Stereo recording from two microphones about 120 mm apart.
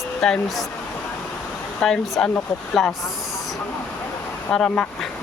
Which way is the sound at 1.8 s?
5° left (ahead or behind).